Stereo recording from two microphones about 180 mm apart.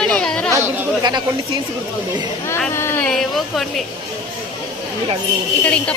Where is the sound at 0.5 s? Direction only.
20° right (ahead or behind).